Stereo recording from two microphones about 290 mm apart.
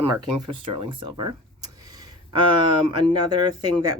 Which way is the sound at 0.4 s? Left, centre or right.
Centre.